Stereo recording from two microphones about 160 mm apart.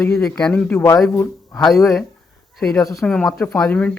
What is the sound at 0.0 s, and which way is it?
Speech, 5° left (ahead or behind).